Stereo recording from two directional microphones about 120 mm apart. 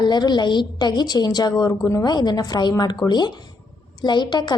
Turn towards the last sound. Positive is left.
turn(degrees=40)  # may be behind; listen again after turning